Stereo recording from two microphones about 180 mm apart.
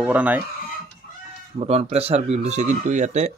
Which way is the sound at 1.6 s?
35° right (ahead or behind).